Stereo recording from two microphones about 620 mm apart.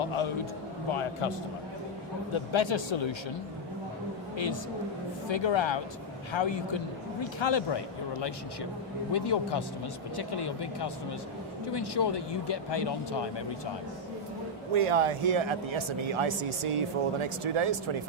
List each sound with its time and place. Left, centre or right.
0.0 s speech: left
2.3 s speech: left
5.3 s speech: left
14.8 s speech: right